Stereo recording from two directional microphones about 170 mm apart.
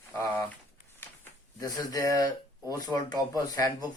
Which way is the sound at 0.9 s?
15° left (ahead or behind).